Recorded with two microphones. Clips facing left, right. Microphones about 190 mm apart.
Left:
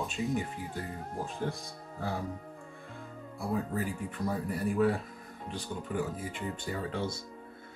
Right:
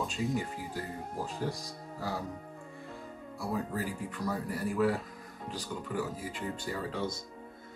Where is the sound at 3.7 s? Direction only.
25° left (ahead or behind).